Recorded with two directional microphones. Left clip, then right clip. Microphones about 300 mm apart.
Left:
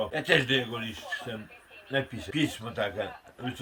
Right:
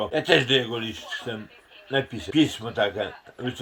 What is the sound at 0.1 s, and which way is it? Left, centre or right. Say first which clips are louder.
Speech: right 6 dB; centre.